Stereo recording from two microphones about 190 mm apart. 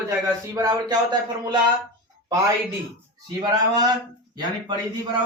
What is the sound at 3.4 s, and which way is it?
Speech, 20° right (ahead or behind).